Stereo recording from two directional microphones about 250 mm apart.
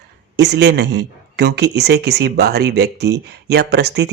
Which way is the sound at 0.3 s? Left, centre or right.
Right.